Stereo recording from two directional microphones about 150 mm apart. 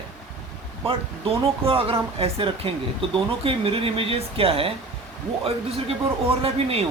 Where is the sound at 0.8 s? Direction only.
40° right (ahead or behind).